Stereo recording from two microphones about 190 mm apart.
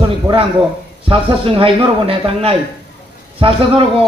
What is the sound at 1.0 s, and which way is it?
A man's voice, 30° right (ahead or behind).